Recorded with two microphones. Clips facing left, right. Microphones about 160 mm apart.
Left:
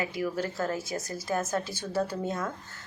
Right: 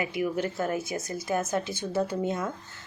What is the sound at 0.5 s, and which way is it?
Speech, 20° right (ahead or behind).